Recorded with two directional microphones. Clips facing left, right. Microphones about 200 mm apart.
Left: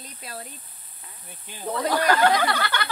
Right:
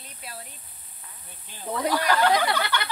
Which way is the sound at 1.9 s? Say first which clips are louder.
Left 2 dB; 50° left (ahead or behind).